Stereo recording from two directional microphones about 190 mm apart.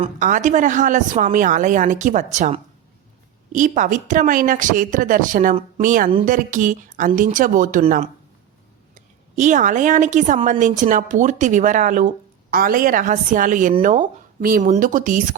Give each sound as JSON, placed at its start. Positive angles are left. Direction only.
{"t": 0.0, "sound": "a woman's voice", "side_deg": -40}